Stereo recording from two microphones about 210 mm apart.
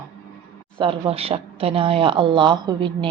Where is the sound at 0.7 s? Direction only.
25° right (ahead or behind).